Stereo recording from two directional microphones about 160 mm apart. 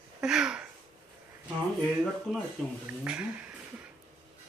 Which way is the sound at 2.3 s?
Centre (ahead or behind).